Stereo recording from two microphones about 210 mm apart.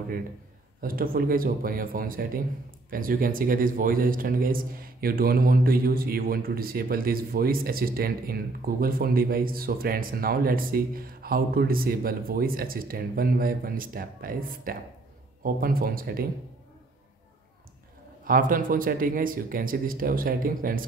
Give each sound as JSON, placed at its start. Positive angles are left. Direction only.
{"t": 0.7, "sound": "speech", "side_deg": -45}
{"t": 18.2, "sound": "a man's voice", "side_deg": -40}